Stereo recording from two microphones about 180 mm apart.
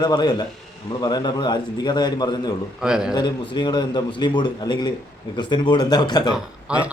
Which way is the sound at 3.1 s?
25° left (ahead or behind).